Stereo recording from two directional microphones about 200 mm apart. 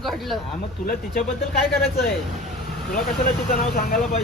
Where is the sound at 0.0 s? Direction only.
Centre (ahead or behind).